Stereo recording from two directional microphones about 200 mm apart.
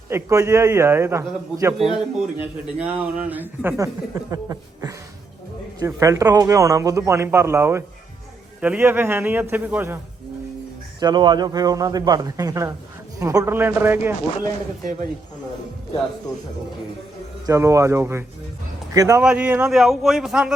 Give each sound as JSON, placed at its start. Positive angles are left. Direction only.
{"t": 0.1, "sound": "speech", "side_deg": -15}
{"t": 11.0, "sound": "a man's voice", "side_deg": -20}
{"t": 17.4, "sound": "speech", "side_deg": -15}